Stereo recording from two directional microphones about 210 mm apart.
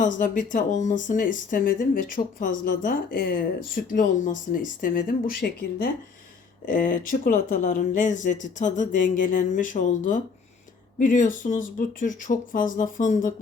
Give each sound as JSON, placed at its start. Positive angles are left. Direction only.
{"t": 0.0, "sound": "speech", "side_deg": 40}